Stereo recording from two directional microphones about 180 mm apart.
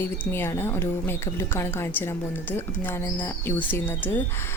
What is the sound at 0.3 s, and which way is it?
A woman's voice, 15° left (ahead or behind).